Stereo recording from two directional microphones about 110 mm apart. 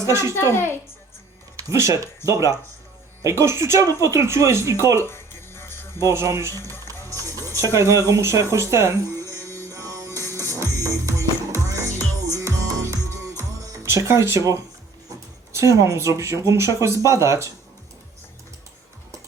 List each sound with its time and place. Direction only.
0.0 s speech: 25° right (ahead or behind)
1.5 s speech: 30° right (ahead or behind)
5.0 s music: 20° left (ahead or behind)
6.1 s speech: 25° right (ahead or behind)
7.1 s music: 30° right (ahead or behind)
7.5 s speech: 25° right (ahead or behind)
9.7 s music: 30° right (ahead or behind)
15.5 s speech: 30° right (ahead or behind)